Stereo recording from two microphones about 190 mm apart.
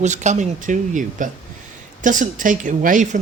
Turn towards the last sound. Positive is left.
turn(degrees=-40)  # may be behind; listen again after turning